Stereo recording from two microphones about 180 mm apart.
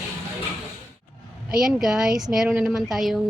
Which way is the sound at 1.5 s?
5° right (ahead or behind).